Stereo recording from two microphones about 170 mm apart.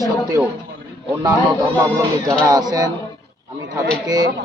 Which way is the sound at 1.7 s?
20° right (ahead or behind).